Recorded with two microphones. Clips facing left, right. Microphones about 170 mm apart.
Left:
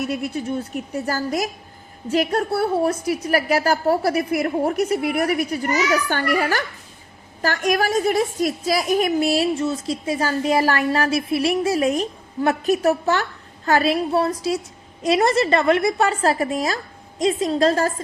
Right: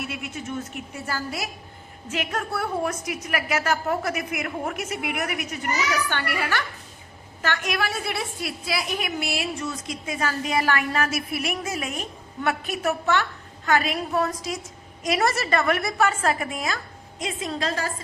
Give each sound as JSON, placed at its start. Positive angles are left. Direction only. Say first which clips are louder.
{"t": 0.0, "sound": "a woman's voice", "louder": "left 8 dB", "side_deg": 40}